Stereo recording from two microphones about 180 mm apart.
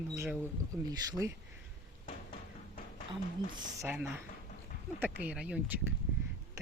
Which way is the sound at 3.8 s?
10° right (ahead or behind).